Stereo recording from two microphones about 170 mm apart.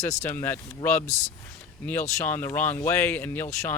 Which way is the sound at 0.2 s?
15° left (ahead or behind).